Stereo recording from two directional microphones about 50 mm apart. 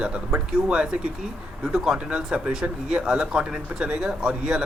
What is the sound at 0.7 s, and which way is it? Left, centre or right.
Speech, centre.